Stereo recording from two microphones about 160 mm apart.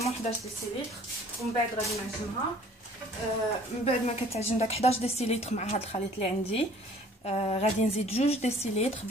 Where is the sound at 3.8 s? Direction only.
40° left (ahead or behind).